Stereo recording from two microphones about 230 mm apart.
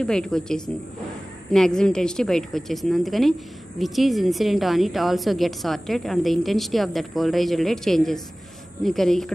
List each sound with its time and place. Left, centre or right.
0.0 s a woman's voice: centre